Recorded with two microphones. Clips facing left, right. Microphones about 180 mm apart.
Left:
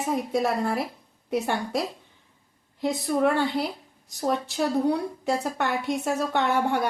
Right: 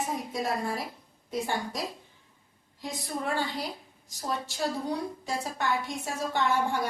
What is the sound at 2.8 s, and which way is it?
A woman's voice, 65° left (ahead or behind).